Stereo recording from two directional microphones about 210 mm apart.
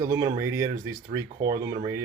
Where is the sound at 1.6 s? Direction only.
15° right (ahead or behind).